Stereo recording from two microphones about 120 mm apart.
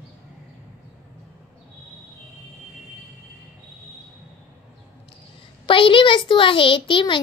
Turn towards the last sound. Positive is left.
turn(degrees=45)  # may be behind; listen again after turning